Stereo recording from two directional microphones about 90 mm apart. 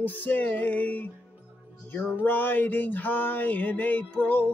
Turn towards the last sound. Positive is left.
turn(degrees=20)  # may be behind; listen again after turning